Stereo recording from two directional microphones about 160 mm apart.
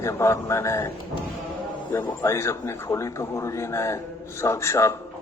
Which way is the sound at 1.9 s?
15° left (ahead or behind).